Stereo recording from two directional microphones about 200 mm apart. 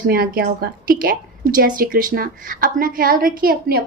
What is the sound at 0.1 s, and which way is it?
A woman's voice, 50° right (ahead or behind).